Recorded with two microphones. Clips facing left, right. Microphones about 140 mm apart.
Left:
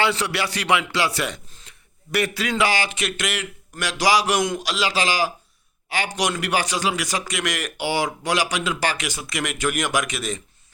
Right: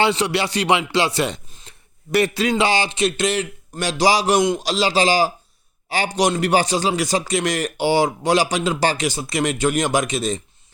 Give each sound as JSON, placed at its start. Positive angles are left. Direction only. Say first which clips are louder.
{"t": 0.0, "sound": "speech", "louder": "right 4 dB", "side_deg": -20}